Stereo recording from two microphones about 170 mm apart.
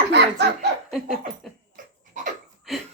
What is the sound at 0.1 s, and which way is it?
Laughter, 85° right.